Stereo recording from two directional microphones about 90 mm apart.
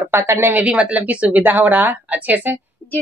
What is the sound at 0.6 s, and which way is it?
Speech, 15° right (ahead or behind).